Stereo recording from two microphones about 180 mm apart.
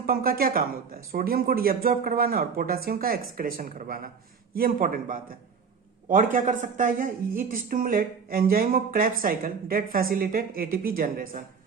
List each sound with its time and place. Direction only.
0.0 s speech: 55° right (ahead or behind)